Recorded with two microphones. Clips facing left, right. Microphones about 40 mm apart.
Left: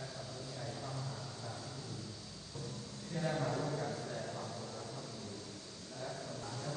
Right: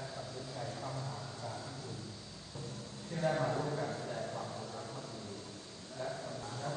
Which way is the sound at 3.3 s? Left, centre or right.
Right.